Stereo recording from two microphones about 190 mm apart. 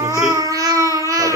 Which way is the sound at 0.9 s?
15° right (ahead or behind).